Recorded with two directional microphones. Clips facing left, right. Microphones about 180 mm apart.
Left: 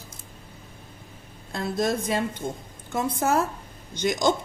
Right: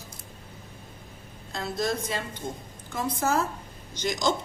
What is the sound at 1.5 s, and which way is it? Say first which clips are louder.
A woman's voice: left 3 dB; 50° left (ahead or behind).